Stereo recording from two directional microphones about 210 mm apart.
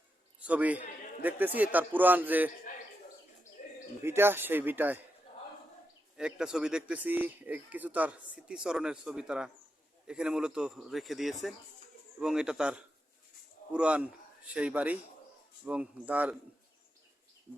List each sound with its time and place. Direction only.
0.4 s speech: 5° right (ahead or behind)
3.6 s bird: 40° left (ahead or behind)
4.0 s speech: 10° right (ahead or behind)
6.1 s speech: 5° right (ahead or behind)